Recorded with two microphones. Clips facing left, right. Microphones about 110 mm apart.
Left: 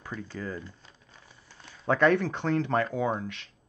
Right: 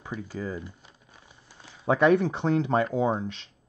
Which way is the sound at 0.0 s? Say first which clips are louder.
Right 3 dB; 15° right (ahead or behind).